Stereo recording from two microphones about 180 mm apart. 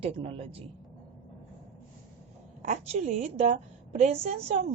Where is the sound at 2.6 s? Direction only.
40° right (ahead or behind).